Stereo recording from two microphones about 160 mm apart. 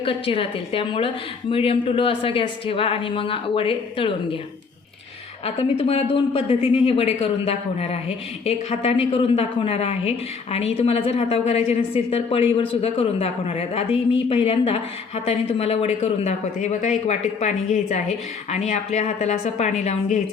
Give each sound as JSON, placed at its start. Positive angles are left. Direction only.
{"t": 0.0, "sound": "a woman's voice", "side_deg": 35}
{"t": 5.5, "sound": "a woman's voice", "side_deg": 35}